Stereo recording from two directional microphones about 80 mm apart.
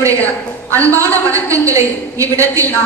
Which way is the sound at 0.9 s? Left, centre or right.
Right.